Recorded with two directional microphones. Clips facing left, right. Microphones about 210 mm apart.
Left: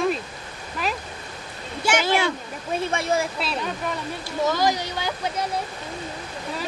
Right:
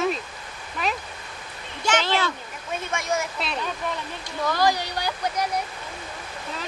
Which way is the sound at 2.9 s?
30° left (ahead or behind).